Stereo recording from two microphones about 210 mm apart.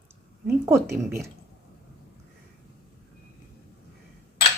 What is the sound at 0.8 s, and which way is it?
Speech, 10° right (ahead or behind).